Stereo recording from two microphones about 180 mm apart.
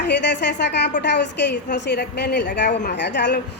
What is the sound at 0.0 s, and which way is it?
A woman's voice, 70° left (ahead or behind).